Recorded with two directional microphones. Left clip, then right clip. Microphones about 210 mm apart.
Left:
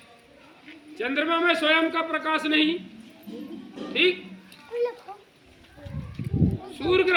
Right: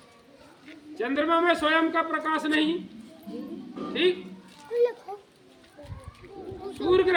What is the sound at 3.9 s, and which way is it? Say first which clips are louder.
Speech: left 3 dB; 15° right (ahead or behind).